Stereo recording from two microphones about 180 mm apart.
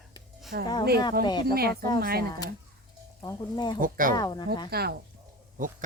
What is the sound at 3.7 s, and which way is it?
Speech, 50° right (ahead or behind).